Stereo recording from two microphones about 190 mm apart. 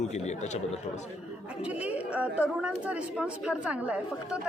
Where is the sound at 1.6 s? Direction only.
5° right (ahead or behind).